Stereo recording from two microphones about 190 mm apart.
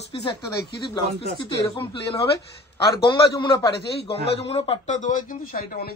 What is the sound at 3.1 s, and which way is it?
A man's voice, 20° left (ahead or behind).